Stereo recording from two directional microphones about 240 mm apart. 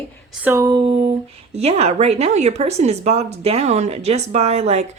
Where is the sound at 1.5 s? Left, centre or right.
Right.